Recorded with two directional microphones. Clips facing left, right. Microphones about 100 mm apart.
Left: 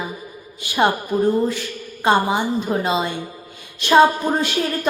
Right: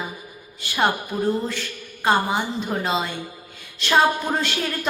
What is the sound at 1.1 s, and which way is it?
Speech, 35° left (ahead or behind).